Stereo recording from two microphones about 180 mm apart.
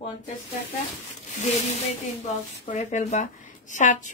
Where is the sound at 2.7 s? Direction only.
40° left (ahead or behind).